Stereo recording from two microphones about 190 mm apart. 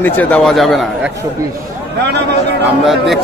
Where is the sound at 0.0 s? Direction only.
10° left (ahead or behind).